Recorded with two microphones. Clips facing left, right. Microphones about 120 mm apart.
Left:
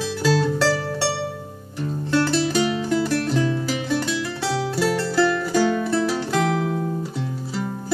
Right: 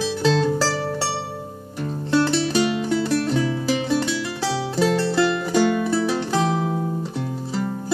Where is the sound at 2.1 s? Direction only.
10° right (ahead or behind).